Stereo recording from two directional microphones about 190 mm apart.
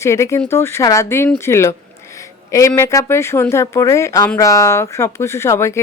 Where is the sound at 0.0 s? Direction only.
15° left (ahead or behind).